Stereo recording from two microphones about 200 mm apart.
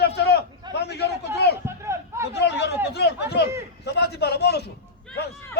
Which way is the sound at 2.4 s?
55° left (ahead or behind).